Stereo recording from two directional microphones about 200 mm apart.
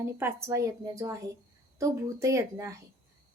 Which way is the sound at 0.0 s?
10° right (ahead or behind).